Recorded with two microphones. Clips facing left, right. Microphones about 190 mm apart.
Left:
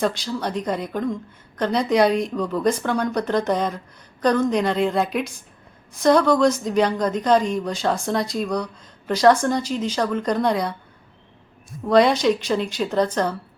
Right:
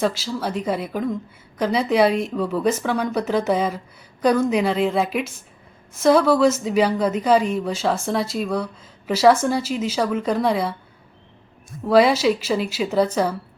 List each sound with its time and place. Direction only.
0.0 s a woman's voice: centre (ahead or behind)
11.9 s a woman's voice: 5° right (ahead or behind)